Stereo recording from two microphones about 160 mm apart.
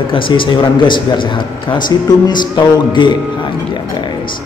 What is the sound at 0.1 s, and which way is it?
A man's voice, 30° left (ahead or behind).